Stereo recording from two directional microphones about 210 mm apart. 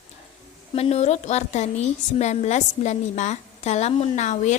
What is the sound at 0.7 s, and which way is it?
A woman's voice, 30° left (ahead or behind).